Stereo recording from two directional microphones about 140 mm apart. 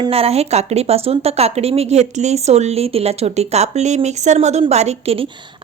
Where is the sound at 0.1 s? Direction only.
45° right (ahead or behind).